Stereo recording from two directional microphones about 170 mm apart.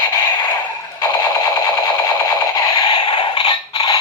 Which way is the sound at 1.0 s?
20° left (ahead or behind).